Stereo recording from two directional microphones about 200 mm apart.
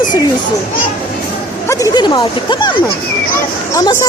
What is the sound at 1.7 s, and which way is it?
Speech, 20° left (ahead or behind).